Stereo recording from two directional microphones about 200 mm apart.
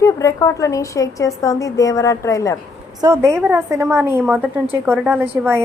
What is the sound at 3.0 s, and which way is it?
A woman's voice, 15° right (ahead or behind).